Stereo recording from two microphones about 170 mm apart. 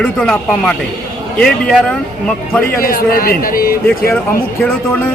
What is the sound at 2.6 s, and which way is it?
A man's voice, 60° left (ahead or behind).